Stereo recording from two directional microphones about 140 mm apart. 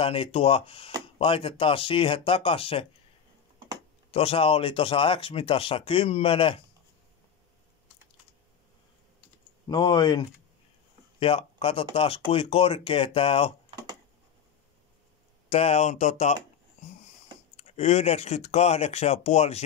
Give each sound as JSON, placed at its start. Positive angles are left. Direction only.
{"t": 0.0, "sound": "speech", "side_deg": 40}
{"t": 4.1, "sound": "speech", "side_deg": 45}
{"t": 9.7, "sound": "speech", "side_deg": 30}
{"t": 11.1, "sound": "speech", "side_deg": 40}
{"t": 15.5, "sound": "speech", "side_deg": 50}
{"t": 17.6, "sound": "speech", "side_deg": 50}